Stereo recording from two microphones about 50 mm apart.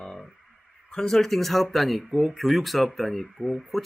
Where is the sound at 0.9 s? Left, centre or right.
Centre.